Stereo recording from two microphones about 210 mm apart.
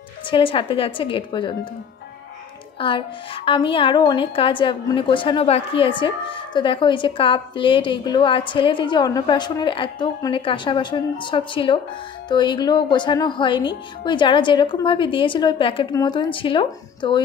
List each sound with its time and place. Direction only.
0.3 s a woman's voice: 25° left (ahead or behind)
2.8 s a woman's voice: 25° left (ahead or behind)